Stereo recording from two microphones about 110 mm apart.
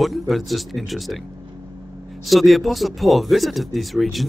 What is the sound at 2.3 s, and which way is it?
Speech, centre (ahead or behind).